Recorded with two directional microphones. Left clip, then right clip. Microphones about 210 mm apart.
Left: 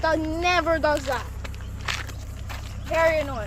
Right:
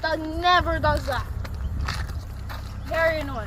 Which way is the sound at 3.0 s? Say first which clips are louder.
Left 2 dB; 25° left (ahead or behind).